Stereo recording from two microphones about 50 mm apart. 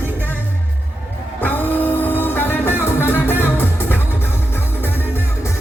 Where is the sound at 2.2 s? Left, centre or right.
Left.